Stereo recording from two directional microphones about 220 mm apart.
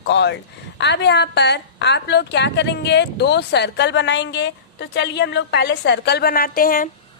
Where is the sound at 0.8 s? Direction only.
50° left (ahead or behind).